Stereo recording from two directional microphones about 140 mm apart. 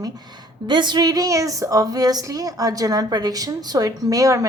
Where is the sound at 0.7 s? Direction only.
30° right (ahead or behind).